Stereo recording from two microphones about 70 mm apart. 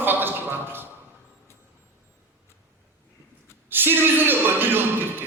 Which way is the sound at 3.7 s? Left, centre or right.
Right.